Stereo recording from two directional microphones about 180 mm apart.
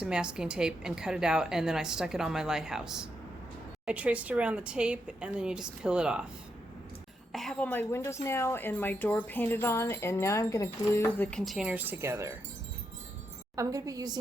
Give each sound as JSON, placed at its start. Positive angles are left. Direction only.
{"t": 0.0, "sound": "a woman's voice", "side_deg": -5}
{"t": 7.3, "sound": "a woman's voice", "side_deg": 5}
{"t": 13.6, "sound": "a woman's voice", "side_deg": -20}